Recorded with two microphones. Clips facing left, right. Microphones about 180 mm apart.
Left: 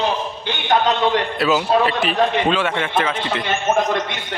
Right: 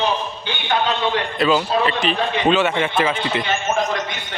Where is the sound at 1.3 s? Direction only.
5° left (ahead or behind).